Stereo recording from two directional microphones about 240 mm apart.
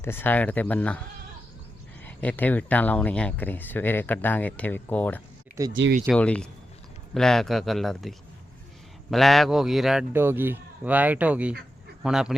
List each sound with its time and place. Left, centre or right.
0.0 s speech: centre
2.0 s speech: centre
5.7 s speech: right
6.1 s a man's voice: centre